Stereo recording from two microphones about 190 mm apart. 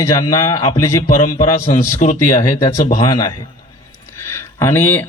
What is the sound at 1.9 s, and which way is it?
Speech, 40° left (ahead or behind).